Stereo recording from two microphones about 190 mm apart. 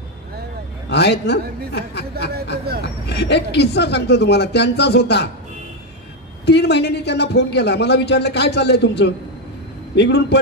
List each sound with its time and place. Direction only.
0.8 s a man's voice: 65° left (ahead or behind)
6.4 s a man's voice: 65° left (ahead or behind)